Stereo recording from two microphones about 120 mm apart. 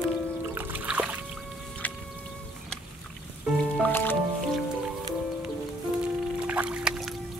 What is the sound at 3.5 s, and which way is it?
Music, 15° left (ahead or behind).